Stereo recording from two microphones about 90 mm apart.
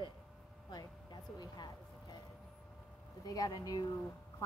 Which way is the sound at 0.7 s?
50° left (ahead or behind).